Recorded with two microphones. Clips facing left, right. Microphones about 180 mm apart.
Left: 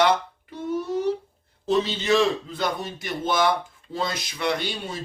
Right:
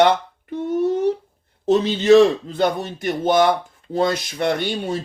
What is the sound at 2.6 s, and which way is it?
Speech, 60° right (ahead or behind).